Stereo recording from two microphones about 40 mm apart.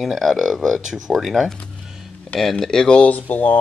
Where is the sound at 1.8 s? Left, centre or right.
Centre.